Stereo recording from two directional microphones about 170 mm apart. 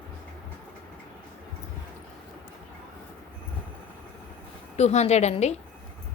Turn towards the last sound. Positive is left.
turn(degrees=40)  # may be behind; listen again after turning